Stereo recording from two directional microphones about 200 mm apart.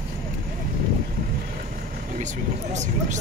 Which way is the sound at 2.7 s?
35° right (ahead or behind).